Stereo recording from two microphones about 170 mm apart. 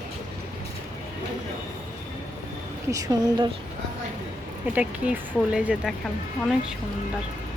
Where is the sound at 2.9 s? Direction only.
20° right (ahead or behind).